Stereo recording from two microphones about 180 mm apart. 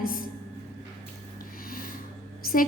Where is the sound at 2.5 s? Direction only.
50° left (ahead or behind).